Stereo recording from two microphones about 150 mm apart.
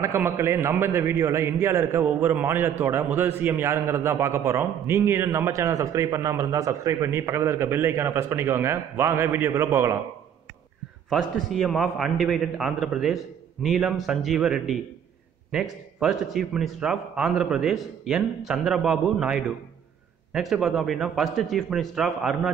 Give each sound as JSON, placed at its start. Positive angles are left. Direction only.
{"t": 0.0, "sound": "a man's voice", "side_deg": -15}
{"t": 11.1, "sound": "a man's voice", "side_deg": 0}